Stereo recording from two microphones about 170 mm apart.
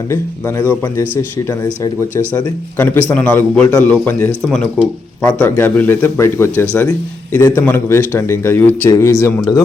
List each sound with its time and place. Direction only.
0.1 s speech: 15° left (ahead or behind)